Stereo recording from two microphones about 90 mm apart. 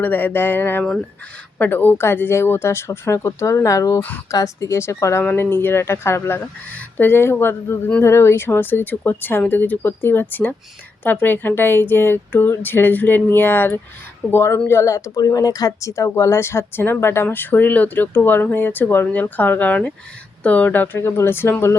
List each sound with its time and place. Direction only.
0.0 s a woman's voice: 20° left (ahead or behind)
5.2 s a woman's voice: 20° left (ahead or behind)